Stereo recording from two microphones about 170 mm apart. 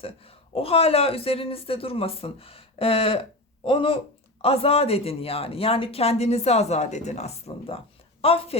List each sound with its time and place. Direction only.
0.0 s speech: 35° left (ahead or behind)